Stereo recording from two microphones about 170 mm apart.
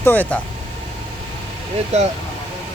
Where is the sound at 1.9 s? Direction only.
40° right (ahead or behind).